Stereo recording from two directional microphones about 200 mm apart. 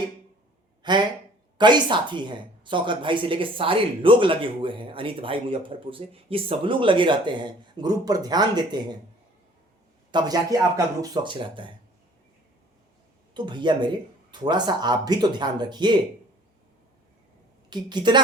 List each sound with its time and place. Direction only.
0.8 s a sound: 20° right (ahead or behind)
1.5 s speech: 20° right (ahead or behind)
10.1 s speech: 20° right (ahead or behind)
13.3 s speech: 25° right (ahead or behind)
17.7 s speech: 20° right (ahead or behind)